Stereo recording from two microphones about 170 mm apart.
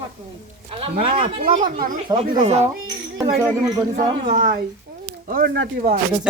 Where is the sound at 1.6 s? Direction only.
50° right (ahead or behind).